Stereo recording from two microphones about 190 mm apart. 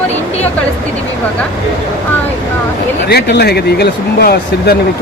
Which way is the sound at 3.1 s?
60° left (ahead or behind).